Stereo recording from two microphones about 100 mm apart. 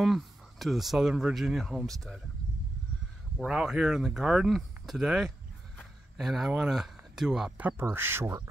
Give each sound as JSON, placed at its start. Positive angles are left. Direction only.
{"t": 0.0, "sound": "speech", "side_deg": 0}
{"t": 3.3, "sound": "speech", "side_deg": -5}
{"t": 7.6, "sound": "speech", "side_deg": -25}